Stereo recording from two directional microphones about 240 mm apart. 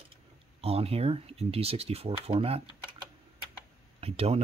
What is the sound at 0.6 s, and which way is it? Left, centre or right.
Speech, right.